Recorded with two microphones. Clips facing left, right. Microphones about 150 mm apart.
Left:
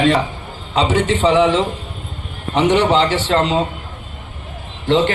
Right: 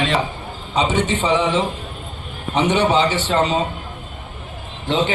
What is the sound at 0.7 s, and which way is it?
A man's voice, 90° left.